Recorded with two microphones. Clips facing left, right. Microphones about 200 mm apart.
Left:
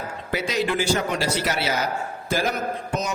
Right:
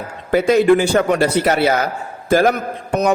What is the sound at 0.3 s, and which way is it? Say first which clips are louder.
A man's voice: right 13 dB; 55° right (ahead or behind).